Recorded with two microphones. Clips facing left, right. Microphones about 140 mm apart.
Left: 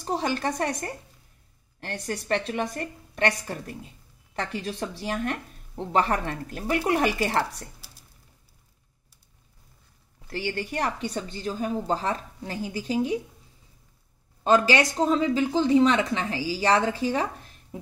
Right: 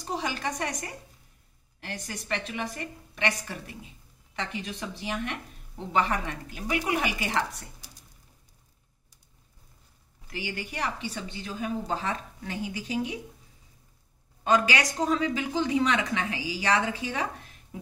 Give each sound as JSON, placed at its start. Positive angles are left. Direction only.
{"t": 0.0, "sound": "speech", "side_deg": 35}
{"t": 10.2, "sound": "speech", "side_deg": 35}
{"t": 14.4, "sound": "speech", "side_deg": 30}